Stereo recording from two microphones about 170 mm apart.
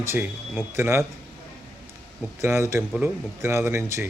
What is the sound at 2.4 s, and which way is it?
Speech, 15° right (ahead or behind).